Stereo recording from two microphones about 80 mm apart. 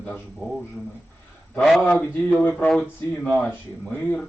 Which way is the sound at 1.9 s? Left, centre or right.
Left.